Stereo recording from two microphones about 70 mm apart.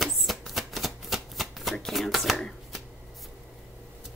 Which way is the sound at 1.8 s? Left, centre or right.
Centre.